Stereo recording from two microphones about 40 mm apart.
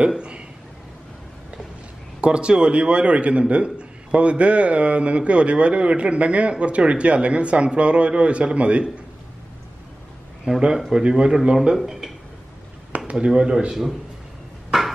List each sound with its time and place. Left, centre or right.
0.2 s speech: right
2.2 s a man's voice: right
10.5 s a man's voice: right
12.9 s speech: right